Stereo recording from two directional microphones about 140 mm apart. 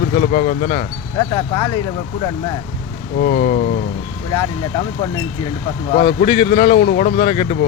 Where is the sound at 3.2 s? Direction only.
90° left.